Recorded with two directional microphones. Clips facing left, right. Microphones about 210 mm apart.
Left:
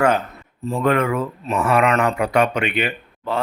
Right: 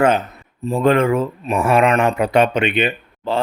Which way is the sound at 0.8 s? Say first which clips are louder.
Right 4 dB; 25° right (ahead or behind).